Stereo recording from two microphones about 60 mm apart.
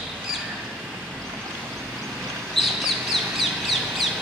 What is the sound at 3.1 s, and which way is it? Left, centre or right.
Bird, centre.